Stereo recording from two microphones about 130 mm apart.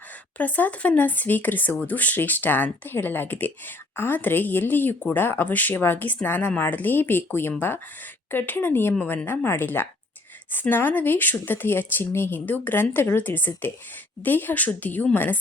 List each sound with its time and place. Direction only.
0.3 s speech: 10° left (ahead or behind)